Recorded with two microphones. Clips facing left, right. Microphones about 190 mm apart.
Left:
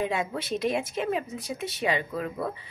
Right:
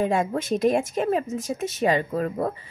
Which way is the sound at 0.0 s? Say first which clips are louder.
Right 6 dB; 45° right (ahead or behind).